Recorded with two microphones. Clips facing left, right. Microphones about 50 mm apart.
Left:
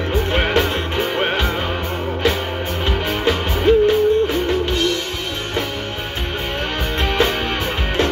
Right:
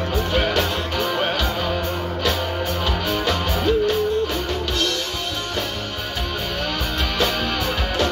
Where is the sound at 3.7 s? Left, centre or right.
Left.